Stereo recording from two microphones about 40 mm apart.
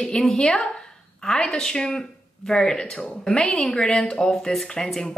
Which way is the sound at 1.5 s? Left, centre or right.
Centre.